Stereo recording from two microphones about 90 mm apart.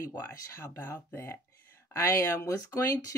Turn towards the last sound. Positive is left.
turn(degrees=40)  # may be behind; listen again after turning